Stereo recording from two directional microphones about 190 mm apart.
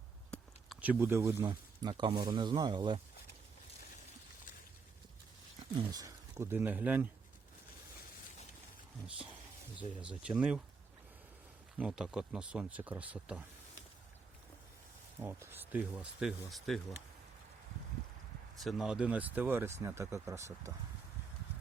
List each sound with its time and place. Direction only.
0.3 s a sound: 5° left (ahead or behind)
0.8 s speech: 10° right (ahead or behind)
5.7 s speech: 20° right (ahead or behind)
9.0 s speech: 5° right (ahead or behind)
11.8 s speech: 5° right (ahead or behind)
15.2 s speech: 10° right (ahead or behind)
18.6 s speech: centre (ahead or behind)